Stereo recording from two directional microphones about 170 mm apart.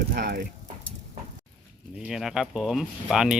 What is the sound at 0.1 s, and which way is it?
Speech, 60° right (ahead or behind).